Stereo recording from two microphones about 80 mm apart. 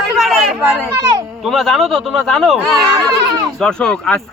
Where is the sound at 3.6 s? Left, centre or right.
Centre.